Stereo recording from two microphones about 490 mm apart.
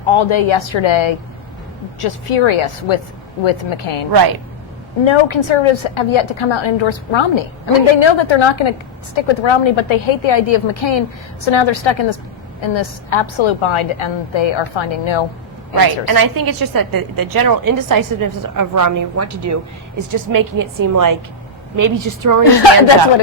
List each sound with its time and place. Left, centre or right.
0.2 s a woman's voice: left
2.0 s speech: left
4.1 s a woman's voice: right
5.0 s a woman's voice: left
15.8 s a woman's voice: right